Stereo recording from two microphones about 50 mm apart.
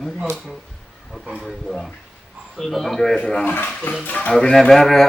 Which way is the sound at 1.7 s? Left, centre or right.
Centre.